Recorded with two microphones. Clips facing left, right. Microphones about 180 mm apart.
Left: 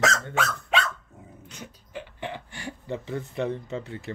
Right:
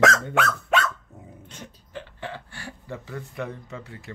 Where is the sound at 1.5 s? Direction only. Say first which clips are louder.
Left 1 dB; 15° left (ahead or behind).